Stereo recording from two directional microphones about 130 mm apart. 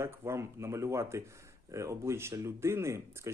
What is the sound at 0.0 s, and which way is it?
Speech, 20° right (ahead or behind).